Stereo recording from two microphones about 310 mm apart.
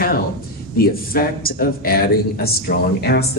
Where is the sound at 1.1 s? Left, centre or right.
Left.